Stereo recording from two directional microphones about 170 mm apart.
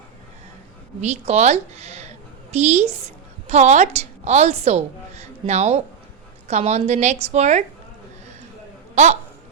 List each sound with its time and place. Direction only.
1.0 s a woman's voice: 40° right (ahead or behind)